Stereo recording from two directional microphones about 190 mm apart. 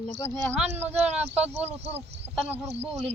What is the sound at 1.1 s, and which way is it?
Speech, 35° right (ahead or behind).